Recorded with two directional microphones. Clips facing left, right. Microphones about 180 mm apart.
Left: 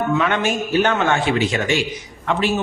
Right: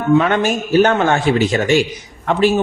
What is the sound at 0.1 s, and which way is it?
A man's voice, 40° right (ahead or behind).